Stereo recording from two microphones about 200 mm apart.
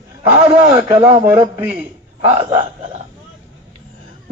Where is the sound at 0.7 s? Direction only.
15° right (ahead or behind).